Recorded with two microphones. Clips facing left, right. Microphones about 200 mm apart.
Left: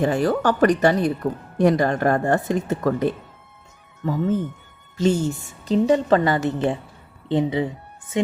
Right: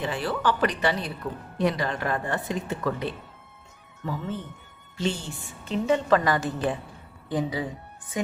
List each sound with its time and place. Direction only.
0.0 s a woman's voice: 45° left (ahead or behind); by 8.2 s 25° left (ahead or behind)